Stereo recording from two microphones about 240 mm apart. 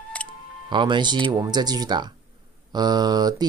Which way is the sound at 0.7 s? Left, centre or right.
Centre.